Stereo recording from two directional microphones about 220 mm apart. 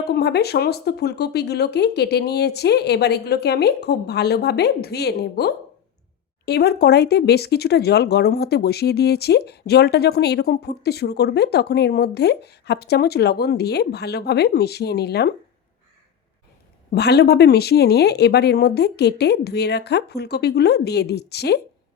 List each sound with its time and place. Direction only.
0.0 s speech: 45° left (ahead or behind)
16.9 s speech: 50° left (ahead or behind)